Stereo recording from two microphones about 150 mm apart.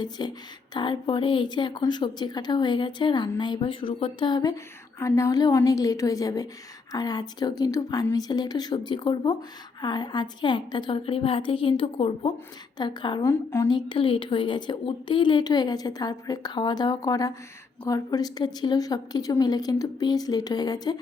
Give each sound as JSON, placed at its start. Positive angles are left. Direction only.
{"t": 0.2, "sound": "a woman's voice", "side_deg": 30}
{"t": 12.7, "sound": "speech", "side_deg": 30}
{"t": 13.2, "sound": "a woman's voice", "side_deg": 15}
{"t": 13.7, "sound": "speech", "side_deg": 30}